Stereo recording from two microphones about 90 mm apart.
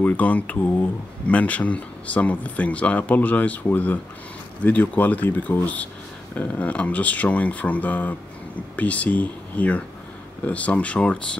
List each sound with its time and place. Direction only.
0.0 s speech: 15° left (ahead or behind)